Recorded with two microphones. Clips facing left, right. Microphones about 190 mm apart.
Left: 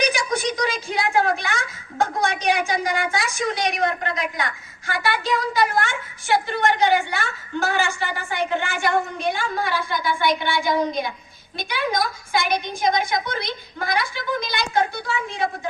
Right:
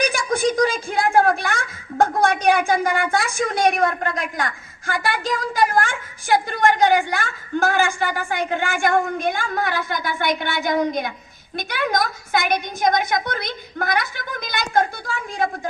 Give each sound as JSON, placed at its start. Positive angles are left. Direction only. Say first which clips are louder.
{"t": 0.0, "sound": "a woman's voice", "louder": "right 2 dB", "side_deg": -50}